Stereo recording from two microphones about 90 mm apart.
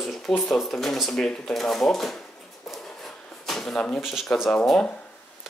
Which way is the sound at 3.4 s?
5° left (ahead or behind).